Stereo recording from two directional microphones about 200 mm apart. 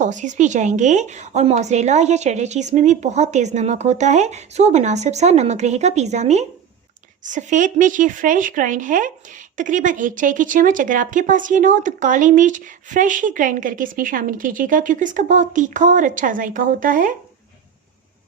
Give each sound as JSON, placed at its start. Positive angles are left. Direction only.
{"t": 0.0, "sound": "speech", "side_deg": -40}